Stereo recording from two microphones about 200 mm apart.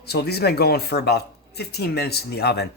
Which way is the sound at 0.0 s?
55° left (ahead or behind).